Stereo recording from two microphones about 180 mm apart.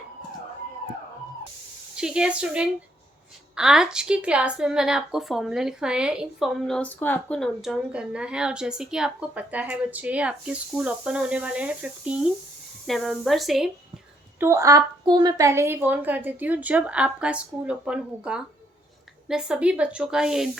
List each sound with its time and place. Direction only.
2.0 s a woman's voice: 5° right (ahead or behind)
14.3 s a woman's voice: 15° right (ahead or behind)